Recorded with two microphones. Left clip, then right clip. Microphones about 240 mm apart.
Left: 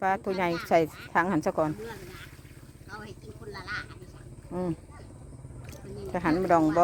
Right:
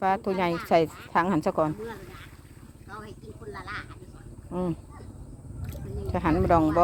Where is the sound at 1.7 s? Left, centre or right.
Left.